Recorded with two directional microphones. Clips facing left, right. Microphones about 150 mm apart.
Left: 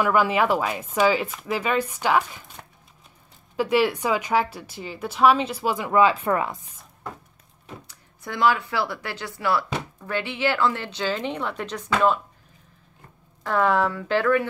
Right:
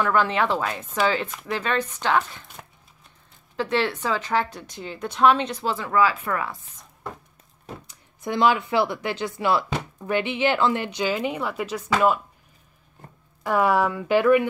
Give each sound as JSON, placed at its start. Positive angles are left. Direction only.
{"t": 0.0, "sound": "a woman's voice", "side_deg": 10}
{"t": 3.5, "sound": "a woman's voice", "side_deg": 10}
{"t": 7.8, "sound": "speech", "side_deg": -20}
{"t": 13.4, "sound": "speech", "side_deg": -10}